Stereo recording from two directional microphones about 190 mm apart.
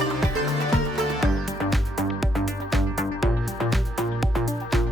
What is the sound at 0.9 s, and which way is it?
Music, centre (ahead or behind).